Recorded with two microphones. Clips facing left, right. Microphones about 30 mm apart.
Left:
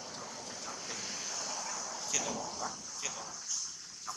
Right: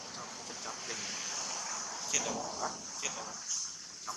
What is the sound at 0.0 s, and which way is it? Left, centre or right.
Vehicle, centre.